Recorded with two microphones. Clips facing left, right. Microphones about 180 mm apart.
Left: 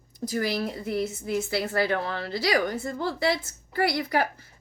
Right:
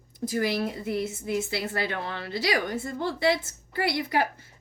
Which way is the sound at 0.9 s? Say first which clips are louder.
Left 2 dB; 20° right (ahead or behind).